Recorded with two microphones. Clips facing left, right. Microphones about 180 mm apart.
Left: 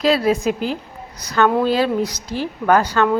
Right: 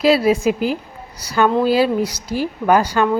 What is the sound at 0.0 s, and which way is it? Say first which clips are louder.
A woman's voice: right 2 dB; 10° right (ahead or behind).